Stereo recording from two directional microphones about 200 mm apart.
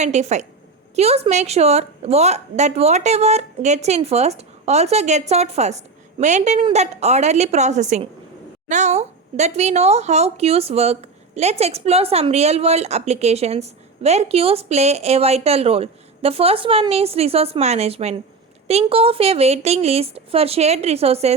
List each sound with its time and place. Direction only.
0.0 s speech: 35° right (ahead or behind)